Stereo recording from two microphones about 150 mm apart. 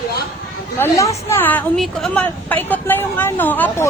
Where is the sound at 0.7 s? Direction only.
20° left (ahead or behind).